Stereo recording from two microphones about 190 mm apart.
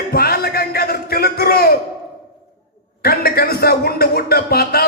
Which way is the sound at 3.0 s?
55° left (ahead or behind).